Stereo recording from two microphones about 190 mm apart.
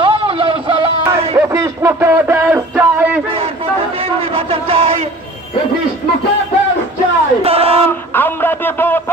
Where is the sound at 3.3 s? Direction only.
30° right (ahead or behind).